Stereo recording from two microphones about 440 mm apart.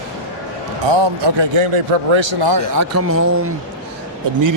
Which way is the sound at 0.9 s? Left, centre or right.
Right.